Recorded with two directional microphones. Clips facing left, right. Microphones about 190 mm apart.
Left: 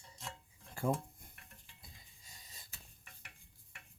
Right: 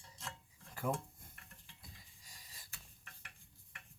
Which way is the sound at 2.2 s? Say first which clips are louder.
Left 2 dB; 25° left (ahead or behind).